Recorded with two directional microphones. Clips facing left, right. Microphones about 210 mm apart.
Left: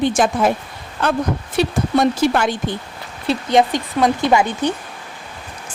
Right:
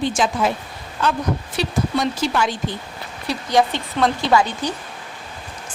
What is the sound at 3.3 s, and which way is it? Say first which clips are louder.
Speech: left 3 dB; 25° left (ahead or behind).